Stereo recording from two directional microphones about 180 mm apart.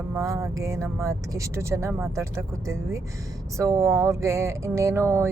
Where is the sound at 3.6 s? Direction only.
15° right (ahead or behind).